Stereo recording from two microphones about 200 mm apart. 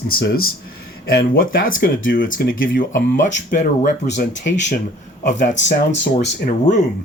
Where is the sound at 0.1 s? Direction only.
50° left (ahead or behind).